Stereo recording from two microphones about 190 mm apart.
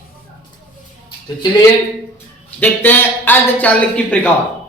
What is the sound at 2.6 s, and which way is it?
A man's voice, 10° left (ahead or behind).